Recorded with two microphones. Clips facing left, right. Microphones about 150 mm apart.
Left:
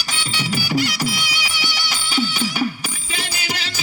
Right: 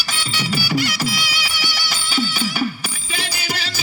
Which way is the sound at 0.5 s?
5° right (ahead or behind).